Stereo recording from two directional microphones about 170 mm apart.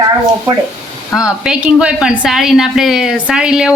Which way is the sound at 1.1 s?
5° right (ahead or behind).